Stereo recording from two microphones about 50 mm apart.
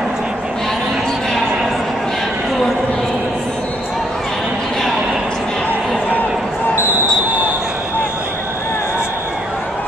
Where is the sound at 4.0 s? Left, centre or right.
Centre.